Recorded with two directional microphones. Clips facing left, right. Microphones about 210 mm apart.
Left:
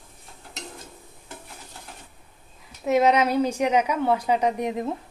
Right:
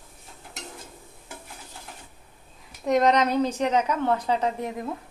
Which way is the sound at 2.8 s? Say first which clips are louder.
Left 1 dB; 5° left (ahead or behind).